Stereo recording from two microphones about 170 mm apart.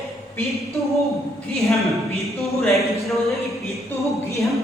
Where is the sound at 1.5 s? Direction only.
Centre (ahead or behind).